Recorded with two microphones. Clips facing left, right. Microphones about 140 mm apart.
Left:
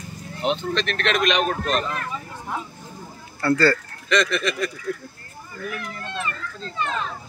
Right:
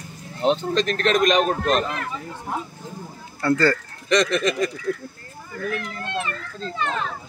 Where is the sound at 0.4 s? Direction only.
35° right (ahead or behind).